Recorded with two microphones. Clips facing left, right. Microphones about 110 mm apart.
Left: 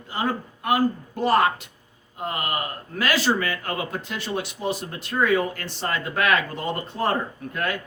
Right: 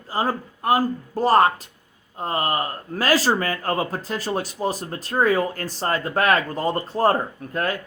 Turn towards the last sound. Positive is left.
turn(degrees=-35)  # may be behind; listen again after turning